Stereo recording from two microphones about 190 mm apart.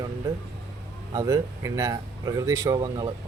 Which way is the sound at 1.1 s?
20° right (ahead or behind).